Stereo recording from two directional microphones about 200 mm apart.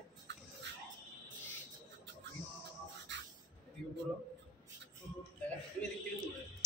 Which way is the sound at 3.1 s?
65° right (ahead or behind).